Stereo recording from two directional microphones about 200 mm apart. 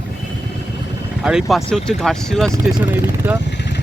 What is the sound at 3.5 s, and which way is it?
Vehicle, 60° left (ahead or behind).